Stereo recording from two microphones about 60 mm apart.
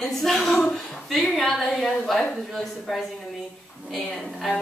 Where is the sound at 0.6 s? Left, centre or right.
Centre.